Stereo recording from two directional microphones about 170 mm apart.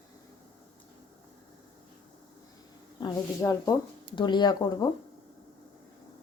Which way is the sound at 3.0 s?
20° left (ahead or behind).